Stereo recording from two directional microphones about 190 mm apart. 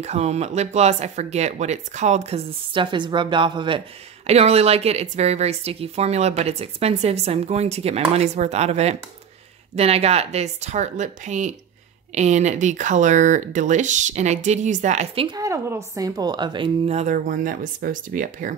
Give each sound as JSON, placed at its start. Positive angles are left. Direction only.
{"t": 0.0, "sound": "speech", "side_deg": -35}
{"t": 15.2, "sound": "a woman's voice", "side_deg": -20}